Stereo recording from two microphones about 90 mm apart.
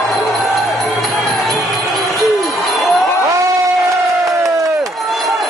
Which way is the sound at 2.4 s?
Centre (ahead or behind).